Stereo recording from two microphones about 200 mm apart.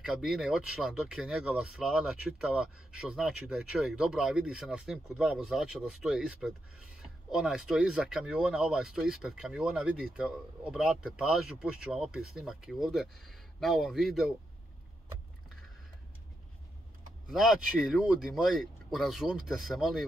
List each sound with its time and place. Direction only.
0.0 s speech: centre (ahead or behind)
17.3 s speech: centre (ahead or behind)